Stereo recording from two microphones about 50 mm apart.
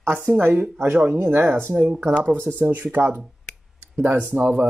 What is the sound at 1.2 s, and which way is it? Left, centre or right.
Speech, right.